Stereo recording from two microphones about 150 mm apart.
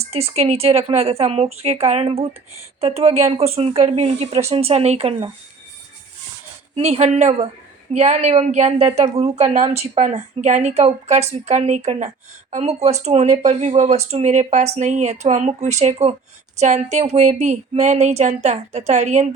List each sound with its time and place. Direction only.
0.0 s a woman's voice: 45° right (ahead or behind)
6.7 s a woman's voice: 40° right (ahead or behind)